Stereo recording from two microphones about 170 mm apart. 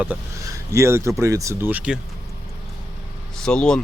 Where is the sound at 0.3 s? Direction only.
20° right (ahead or behind).